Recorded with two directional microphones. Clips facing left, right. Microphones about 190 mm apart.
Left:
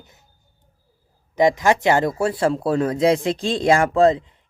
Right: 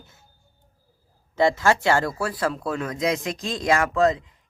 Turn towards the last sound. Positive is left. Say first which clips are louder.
# left 5 dB
turn(degrees=30)  # may be behind; listen again after turning